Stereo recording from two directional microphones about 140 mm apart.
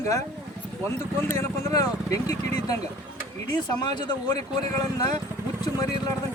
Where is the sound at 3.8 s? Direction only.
30° left (ahead or behind).